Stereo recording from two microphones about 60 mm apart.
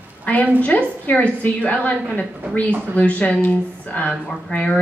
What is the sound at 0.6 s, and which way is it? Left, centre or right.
Speech, left.